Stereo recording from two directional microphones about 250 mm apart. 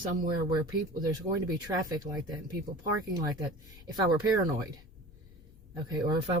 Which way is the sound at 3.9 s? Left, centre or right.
Centre.